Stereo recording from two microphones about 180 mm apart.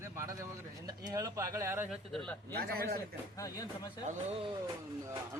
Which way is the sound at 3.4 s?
20° left (ahead or behind).